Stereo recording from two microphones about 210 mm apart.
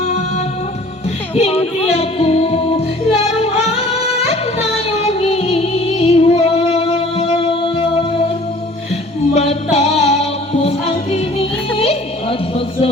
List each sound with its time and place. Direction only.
0.0 s music: 35° left (ahead or behind)
9.3 s music: 30° left (ahead or behind)